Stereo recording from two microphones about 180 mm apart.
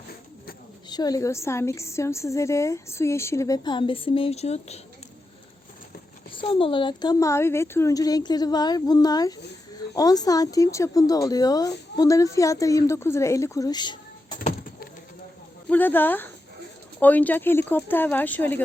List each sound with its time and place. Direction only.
0.9 s a woman's voice: 20° left (ahead or behind)
6.3 s speech: 30° left (ahead or behind)
14.3 s a sound: 50° left (ahead or behind)
15.7 s a woman's voice: 10° left (ahead or behind)